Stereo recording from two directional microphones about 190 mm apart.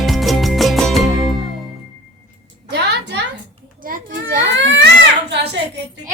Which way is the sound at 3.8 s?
50° right (ahead or behind).